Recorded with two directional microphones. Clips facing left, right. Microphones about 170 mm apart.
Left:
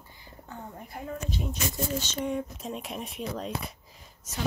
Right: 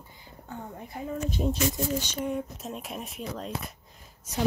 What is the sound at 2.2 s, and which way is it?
Speech, centre (ahead or behind).